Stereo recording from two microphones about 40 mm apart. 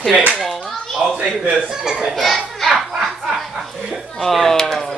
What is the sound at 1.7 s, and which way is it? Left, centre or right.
Speech, centre.